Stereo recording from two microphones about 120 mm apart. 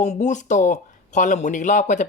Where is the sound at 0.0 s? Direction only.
80° left.